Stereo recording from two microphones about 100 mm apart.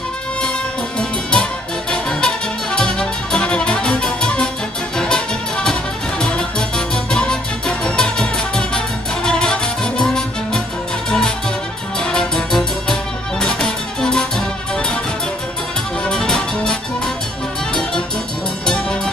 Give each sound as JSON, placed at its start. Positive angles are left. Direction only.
{"t": 0.9, "sound": "music", "side_deg": 10}
{"t": 7.1, "sound": "music", "side_deg": 10}
{"t": 16.1, "sound": "music", "side_deg": 5}